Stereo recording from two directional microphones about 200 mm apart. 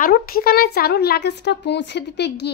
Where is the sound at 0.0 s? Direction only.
45° left (ahead or behind).